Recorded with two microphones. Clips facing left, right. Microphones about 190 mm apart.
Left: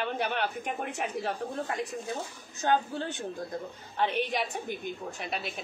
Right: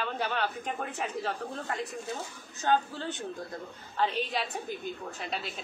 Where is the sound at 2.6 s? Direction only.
15° left (ahead or behind).